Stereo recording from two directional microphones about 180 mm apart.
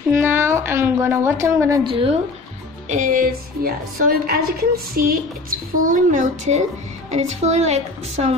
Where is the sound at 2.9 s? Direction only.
45° right (ahead or behind).